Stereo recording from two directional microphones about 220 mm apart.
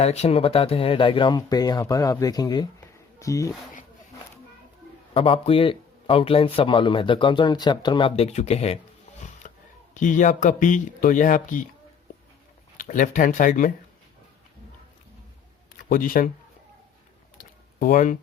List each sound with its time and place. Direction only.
0.0 s a man's voice: 30° left (ahead or behind)
5.1 s a man's voice: 25° left (ahead or behind)
9.4 s a sound: 35° left (ahead or behind)
9.9 s speech: 35° left (ahead or behind)
12.7 s speech: 35° left (ahead or behind)
15.9 s speech: 40° left (ahead or behind)
17.3 s a sound: 40° left (ahead or behind)